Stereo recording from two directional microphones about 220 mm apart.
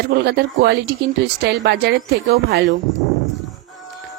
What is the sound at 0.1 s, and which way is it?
A woman's voice, 50° right (ahead or behind).